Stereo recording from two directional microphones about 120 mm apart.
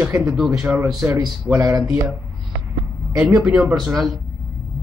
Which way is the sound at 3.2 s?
15° right (ahead or behind).